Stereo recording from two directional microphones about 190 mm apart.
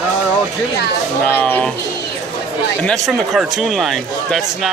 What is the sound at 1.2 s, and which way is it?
Speech, 10° left (ahead or behind).